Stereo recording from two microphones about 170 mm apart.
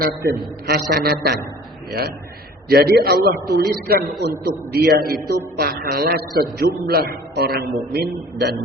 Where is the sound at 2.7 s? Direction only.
65° right (ahead or behind).